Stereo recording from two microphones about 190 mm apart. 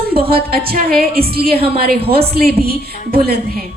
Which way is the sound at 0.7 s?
50° right (ahead or behind).